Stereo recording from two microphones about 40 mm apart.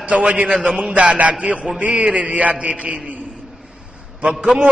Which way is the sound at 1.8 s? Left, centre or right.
Right.